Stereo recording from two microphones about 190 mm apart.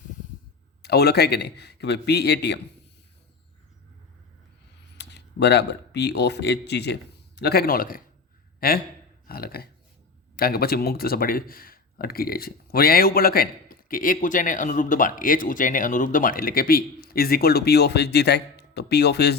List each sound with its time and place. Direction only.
0.8 s a man's voice: 60° left (ahead or behind)
4.9 s speech: 65° left (ahead or behind)